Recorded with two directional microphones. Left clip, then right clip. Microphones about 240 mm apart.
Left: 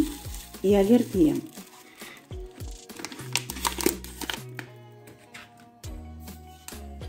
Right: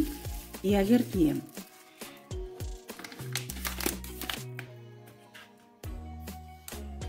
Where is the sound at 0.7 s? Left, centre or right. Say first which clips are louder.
Left 6 dB; right.